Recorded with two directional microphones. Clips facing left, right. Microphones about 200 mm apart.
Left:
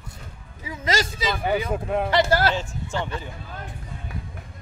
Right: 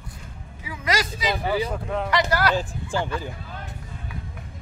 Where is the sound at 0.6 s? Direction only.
25° left (ahead or behind).